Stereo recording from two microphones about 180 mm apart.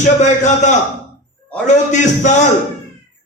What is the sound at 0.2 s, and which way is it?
A man's voice, 40° left (ahead or behind).